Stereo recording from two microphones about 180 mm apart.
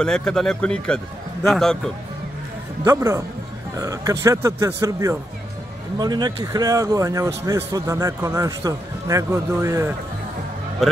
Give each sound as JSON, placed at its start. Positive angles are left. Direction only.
{"t": 0.0, "sound": "a man's voice", "side_deg": 5}
{"t": 2.8, "sound": "speech", "side_deg": -15}